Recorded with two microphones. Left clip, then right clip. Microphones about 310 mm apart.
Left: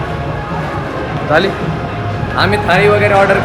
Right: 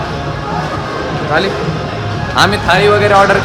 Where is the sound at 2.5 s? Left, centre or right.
Centre.